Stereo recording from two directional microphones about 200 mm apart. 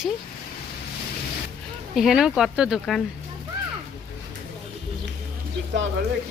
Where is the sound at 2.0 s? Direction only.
5° right (ahead or behind).